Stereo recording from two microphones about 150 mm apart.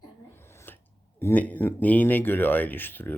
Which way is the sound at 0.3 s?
15° left (ahead or behind).